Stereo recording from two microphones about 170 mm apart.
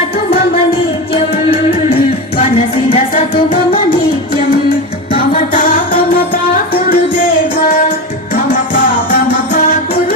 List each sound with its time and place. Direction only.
2.4 s music: 35° left (ahead or behind)
5.9 s music: 55° left (ahead or behind)